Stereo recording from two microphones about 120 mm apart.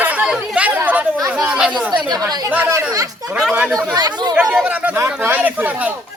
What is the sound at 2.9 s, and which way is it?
Speech, 30° right (ahead or behind).